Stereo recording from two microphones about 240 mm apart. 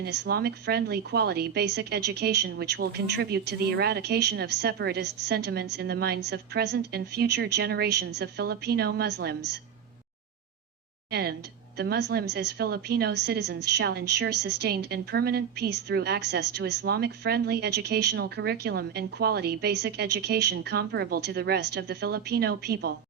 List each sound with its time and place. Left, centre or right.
0.0 s a woman's voice: right
11.1 s a woman's voice: right